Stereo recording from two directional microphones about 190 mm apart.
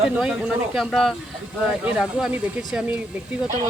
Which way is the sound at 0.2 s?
Centre (ahead or behind).